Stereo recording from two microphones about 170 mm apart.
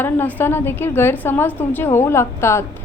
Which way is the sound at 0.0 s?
10° left (ahead or behind).